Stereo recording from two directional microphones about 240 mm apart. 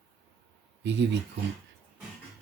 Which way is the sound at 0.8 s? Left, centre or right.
Right.